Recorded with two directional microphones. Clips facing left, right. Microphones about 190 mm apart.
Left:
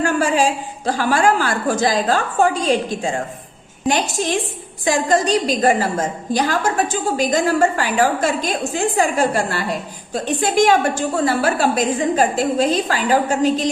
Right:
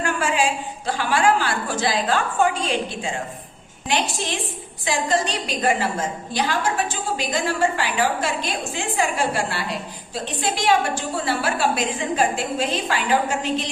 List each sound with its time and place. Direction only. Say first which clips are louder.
0.0 s a woman's voice: left 5 dB; 40° left (ahead or behind)